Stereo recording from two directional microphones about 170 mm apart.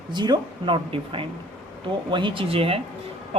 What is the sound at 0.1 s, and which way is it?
A man's voice, 25° right (ahead or behind).